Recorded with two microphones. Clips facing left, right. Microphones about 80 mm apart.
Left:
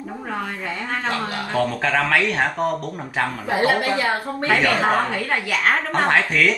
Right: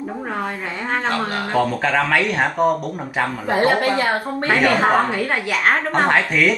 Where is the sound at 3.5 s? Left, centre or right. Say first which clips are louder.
Right 2 dB; right.